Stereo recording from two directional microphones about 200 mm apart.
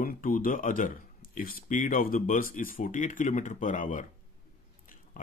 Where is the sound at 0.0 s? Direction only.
45° left (ahead or behind).